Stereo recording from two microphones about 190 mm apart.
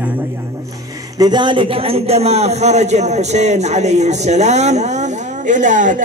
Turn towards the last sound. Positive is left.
turn(degrees=-40)  # may be behind; listen again after turning